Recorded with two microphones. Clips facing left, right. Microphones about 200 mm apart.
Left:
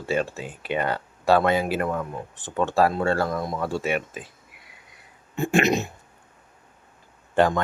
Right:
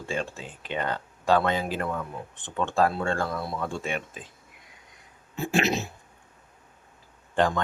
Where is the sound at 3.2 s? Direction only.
40° left (ahead or behind).